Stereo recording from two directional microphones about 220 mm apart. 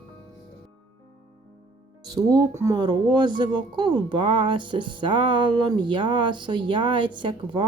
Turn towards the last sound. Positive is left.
turn(degrees=-20)  # may be behind; listen again after turning